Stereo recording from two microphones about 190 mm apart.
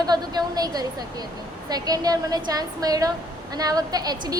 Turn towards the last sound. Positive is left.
turn(degrees=-20)  # may be behind; listen again after turning